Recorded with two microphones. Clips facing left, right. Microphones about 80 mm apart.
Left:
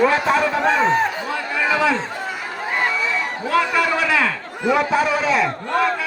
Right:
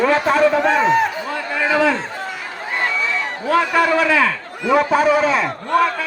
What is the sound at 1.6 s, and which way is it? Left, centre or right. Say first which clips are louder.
Speech: right 3 dB; right.